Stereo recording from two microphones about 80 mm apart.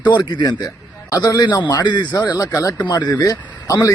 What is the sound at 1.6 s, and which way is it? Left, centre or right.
Speech, left.